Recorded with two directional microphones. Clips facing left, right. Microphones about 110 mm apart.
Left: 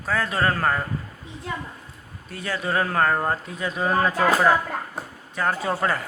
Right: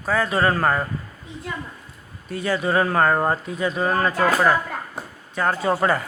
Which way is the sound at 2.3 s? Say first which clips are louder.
Right 5 dB; centre (ahead or behind).